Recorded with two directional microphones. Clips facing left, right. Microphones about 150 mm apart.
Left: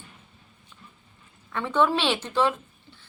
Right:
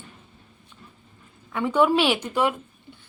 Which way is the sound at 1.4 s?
10° right (ahead or behind).